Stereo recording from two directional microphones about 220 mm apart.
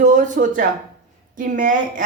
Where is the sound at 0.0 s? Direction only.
35° right (ahead or behind).